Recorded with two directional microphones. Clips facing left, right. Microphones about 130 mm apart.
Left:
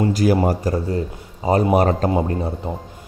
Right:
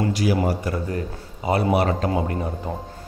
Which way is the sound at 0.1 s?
45° left (ahead or behind).